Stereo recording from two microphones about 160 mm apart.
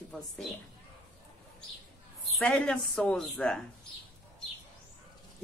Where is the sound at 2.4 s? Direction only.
5° left (ahead or behind).